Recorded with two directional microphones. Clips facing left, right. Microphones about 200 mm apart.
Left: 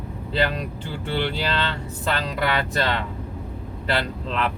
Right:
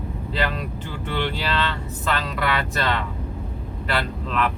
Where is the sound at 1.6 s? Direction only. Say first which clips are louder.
Even; 30° left (ahead or behind).